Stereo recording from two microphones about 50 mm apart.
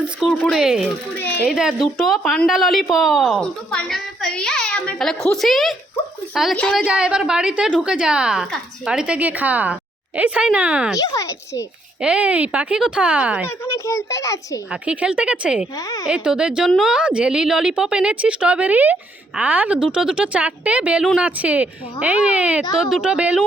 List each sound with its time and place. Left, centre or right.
0.5 s speech: centre
3.8 s a sound: centre
4.3 s a child's voice: centre
6.8 s speech: right
9.1 s speech: right
11.1 s a child's voice: left
11.9 s speech: right
13.7 s a child's voice: left
14.7 s speech: right
16.6 s speech: centre
16.9 s speech: centre
19.8 s speech: centre